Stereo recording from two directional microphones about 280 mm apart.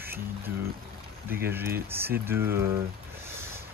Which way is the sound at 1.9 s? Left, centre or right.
Centre.